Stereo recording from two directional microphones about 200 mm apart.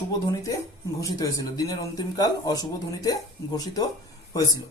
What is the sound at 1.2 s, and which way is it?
A man's voice, 20° left (ahead or behind).